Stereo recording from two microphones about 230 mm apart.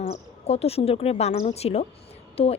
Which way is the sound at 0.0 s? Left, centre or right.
Left.